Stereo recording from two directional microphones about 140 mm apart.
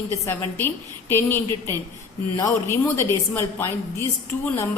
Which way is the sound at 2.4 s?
20° left (ahead or behind).